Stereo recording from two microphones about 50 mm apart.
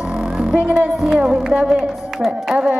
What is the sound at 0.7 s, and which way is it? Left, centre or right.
Speech, centre.